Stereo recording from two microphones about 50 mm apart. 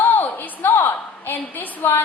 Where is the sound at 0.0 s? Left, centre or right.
Left.